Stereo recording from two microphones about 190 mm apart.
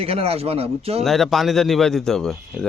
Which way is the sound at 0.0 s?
30° right (ahead or behind).